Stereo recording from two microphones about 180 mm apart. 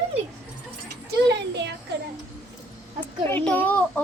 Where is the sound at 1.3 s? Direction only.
70° right (ahead or behind).